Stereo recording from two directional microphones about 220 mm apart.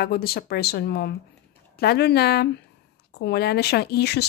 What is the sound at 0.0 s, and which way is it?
Speech, 45° left (ahead or behind).